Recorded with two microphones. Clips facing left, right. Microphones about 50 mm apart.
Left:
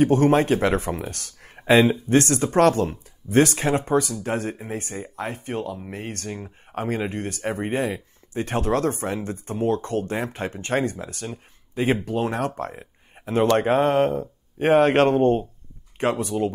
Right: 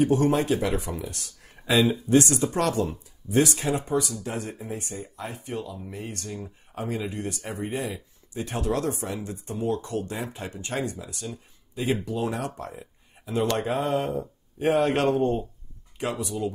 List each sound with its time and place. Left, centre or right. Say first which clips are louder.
0.0 s speech: left 4 dB; left